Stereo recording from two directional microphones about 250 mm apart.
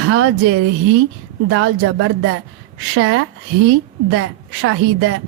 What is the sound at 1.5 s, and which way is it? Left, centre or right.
A woman's voice, right.